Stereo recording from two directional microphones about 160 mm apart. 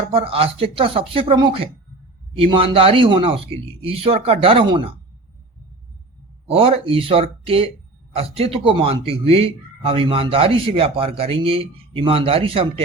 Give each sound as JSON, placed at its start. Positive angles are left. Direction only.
{"t": 0.1, "sound": "speech", "side_deg": -35}
{"t": 6.5, "sound": "speech", "side_deg": -35}